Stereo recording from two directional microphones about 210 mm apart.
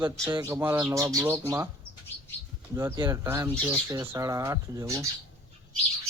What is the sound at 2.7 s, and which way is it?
Speech, 15° right (ahead or behind).